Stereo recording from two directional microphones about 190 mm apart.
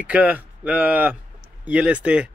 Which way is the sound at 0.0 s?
10° right (ahead or behind).